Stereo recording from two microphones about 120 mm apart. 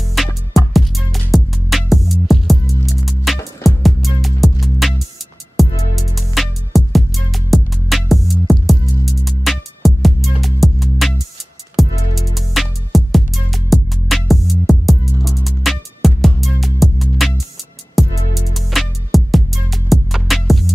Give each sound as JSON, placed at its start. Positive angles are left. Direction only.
{"t": 0.2, "sound": "music", "side_deg": 0}